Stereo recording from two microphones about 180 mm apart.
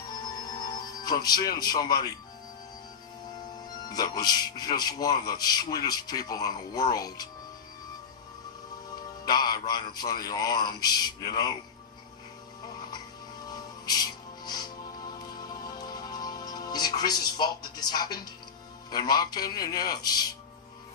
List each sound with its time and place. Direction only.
0.6 s music: 20° left (ahead or behind)
1.6 s speech: 20° left (ahead or behind)
3.9 s speech: 20° left (ahead or behind)
9.2 s music: 25° left (ahead or behind)
10.2 s speech: 20° left (ahead or behind)
13.5 s music: 20° left (ahead or behind)
17.6 s speech: 20° left (ahead or behind)